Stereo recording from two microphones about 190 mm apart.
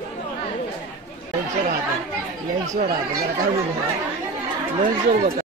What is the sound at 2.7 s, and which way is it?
Speech, 45° right (ahead or behind).